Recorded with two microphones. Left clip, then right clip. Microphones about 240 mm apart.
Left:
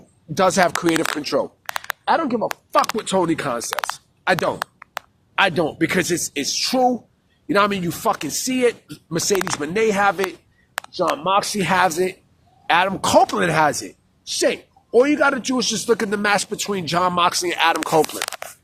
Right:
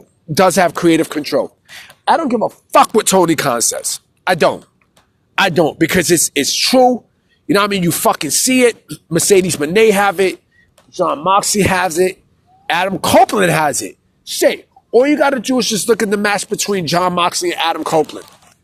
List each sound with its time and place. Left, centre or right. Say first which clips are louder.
0.3 s speech: right 5 dB; right
0.8 s speech: right 6 dB; centre
2.0 s a woman's voice: right 6 dB; right; by 18.0 s centre